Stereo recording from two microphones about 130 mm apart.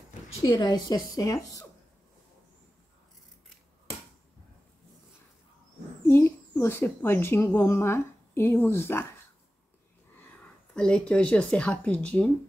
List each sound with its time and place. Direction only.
0.4 s a woman's voice: 30° left (ahead or behind)
6.0 s a sound: 20° left (ahead or behind)
7.8 s speech: 20° left (ahead or behind)
10.7 s speech: 5° left (ahead or behind)